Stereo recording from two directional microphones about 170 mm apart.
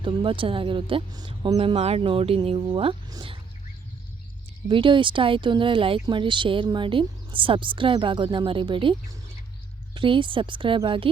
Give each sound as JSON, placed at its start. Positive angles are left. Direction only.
{"t": 0.0, "sound": "speech", "side_deg": -30}
{"t": 4.7, "sound": "speech", "side_deg": -30}